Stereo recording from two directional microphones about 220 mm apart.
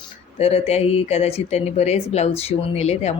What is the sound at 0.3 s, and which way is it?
Speech, 30° left (ahead or behind).